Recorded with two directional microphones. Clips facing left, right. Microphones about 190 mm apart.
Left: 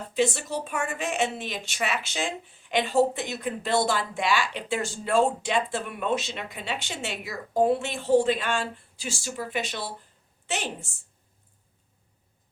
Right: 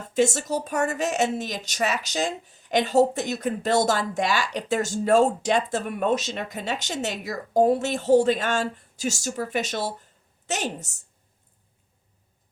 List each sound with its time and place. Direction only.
0.1 s a woman's voice: 45° right (ahead or behind)